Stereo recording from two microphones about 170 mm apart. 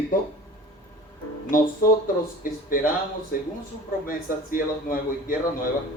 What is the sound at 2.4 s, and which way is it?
Speech, 55° left (ahead or behind).